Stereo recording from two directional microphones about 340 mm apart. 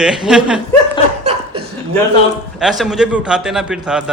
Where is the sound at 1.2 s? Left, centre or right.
Centre.